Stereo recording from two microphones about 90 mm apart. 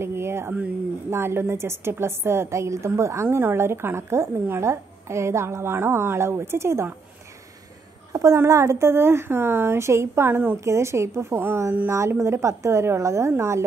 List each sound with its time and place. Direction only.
0.0 s a sound: 30° right (ahead or behind)
1.1 s a woman's voice: 25° right (ahead or behind)
8.1 s a woman's voice: 40° right (ahead or behind)